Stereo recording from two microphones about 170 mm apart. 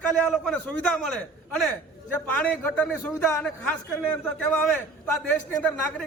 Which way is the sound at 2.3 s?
10° left (ahead or behind).